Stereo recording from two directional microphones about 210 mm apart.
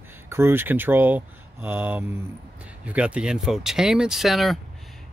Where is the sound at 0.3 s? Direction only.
10° right (ahead or behind).